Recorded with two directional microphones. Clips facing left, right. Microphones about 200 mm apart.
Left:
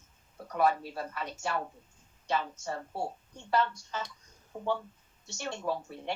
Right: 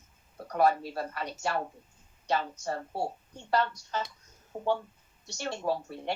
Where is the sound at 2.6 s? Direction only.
40° right (ahead or behind).